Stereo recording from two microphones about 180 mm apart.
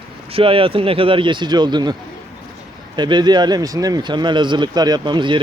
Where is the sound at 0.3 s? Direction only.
30° right (ahead or behind).